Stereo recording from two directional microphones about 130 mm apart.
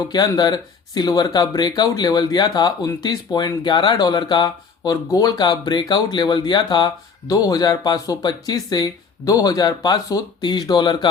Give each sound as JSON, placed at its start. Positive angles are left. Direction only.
{"t": 0.1, "sound": "speech", "side_deg": 35}